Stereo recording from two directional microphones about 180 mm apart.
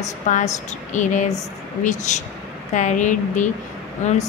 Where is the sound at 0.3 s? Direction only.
45° left (ahead or behind).